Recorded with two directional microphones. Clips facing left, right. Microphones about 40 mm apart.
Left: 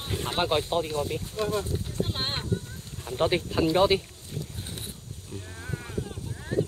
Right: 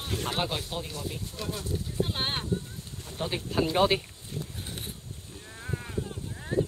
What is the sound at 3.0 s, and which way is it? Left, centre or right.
Speech, left.